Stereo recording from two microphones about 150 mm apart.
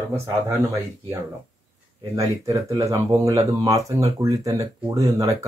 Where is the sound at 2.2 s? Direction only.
20° right (ahead or behind).